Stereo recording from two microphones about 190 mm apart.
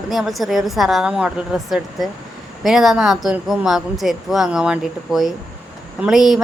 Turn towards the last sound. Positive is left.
turn(degrees=0)  # may be behind; listen again after turning